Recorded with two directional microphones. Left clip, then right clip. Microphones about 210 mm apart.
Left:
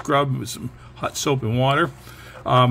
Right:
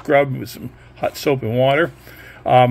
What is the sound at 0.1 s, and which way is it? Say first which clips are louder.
Speech: right 5 dB; 20° left (ahead or behind).